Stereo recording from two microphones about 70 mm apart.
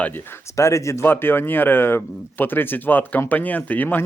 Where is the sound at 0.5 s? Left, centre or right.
Left.